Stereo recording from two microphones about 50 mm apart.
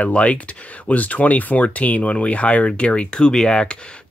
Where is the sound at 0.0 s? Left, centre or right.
Left.